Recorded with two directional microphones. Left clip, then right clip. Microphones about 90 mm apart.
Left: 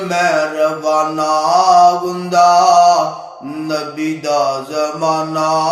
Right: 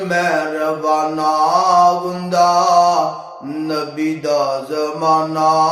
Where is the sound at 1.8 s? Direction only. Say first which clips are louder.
Left 3 dB; 35° right (ahead or behind).